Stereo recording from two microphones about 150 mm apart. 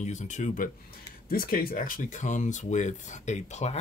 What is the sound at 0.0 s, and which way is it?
Speech, 50° left (ahead or behind).